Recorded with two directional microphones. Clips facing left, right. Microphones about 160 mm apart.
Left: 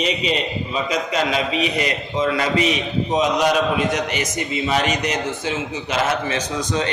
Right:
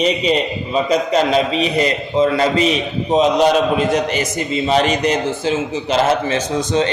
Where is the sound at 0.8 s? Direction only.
35° right (ahead or behind).